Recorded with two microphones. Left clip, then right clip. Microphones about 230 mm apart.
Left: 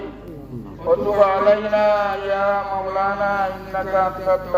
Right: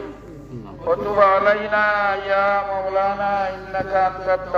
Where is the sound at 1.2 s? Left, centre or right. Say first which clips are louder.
Right 2 dB; right.